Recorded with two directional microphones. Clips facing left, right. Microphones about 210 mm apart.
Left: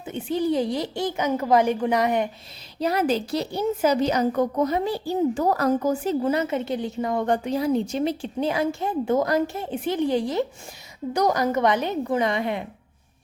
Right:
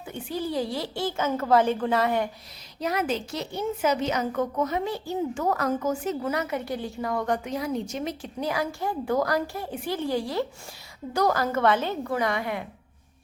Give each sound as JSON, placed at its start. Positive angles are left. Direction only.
{"t": 0.0, "sound": "a child's voice", "side_deg": 20}
{"t": 2.8, "sound": "a woman's voice", "side_deg": 30}